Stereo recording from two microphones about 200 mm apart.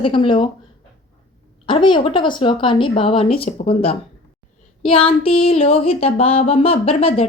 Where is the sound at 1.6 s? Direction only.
25° left (ahead or behind).